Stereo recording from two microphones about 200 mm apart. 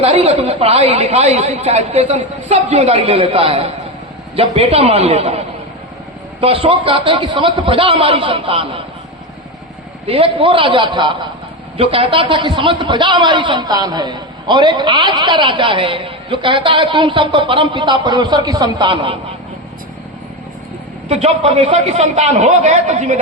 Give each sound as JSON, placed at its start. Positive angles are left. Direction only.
{"t": 0.0, "sound": "a woman's voice", "side_deg": -30}
{"t": 6.4, "sound": "a man's voice", "side_deg": -30}
{"t": 10.1, "sound": "a man's voice", "side_deg": -25}
{"t": 21.1, "sound": "a woman's voice", "side_deg": -30}